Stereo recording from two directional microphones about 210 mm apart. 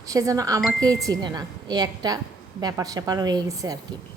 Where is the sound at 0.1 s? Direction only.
15° right (ahead or behind).